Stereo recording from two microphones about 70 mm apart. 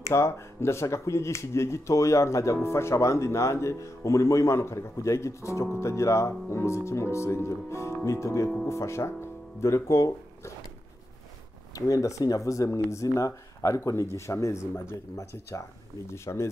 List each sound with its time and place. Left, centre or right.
0.0 s speech: left
11.7 s speech: left